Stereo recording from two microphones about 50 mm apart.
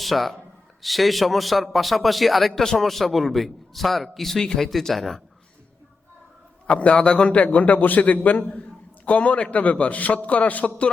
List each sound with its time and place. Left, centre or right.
0.0 s a man's voice: centre
6.7 s a man's voice: left